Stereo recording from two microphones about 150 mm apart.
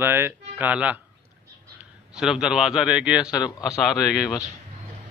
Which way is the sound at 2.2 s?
5° right (ahead or behind).